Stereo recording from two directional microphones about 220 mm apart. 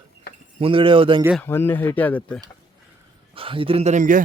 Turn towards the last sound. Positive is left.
turn(degrees=-35)  # may be behind; listen again after turning